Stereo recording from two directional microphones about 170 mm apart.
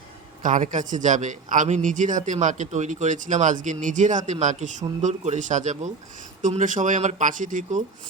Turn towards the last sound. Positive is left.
turn(degrees=-50)  # may be behind; listen again after turning